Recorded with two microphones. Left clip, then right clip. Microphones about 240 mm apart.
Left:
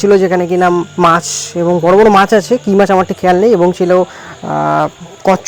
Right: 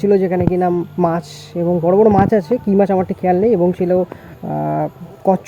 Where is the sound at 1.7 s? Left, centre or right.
Left.